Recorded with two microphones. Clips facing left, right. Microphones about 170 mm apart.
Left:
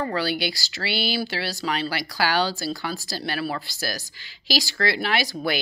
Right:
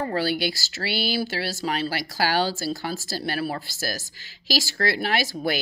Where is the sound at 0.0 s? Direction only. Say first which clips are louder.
Right 1 dB; 45° right (ahead or behind).